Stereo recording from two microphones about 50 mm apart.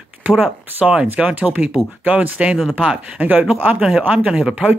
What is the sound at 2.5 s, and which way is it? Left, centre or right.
Speech, centre.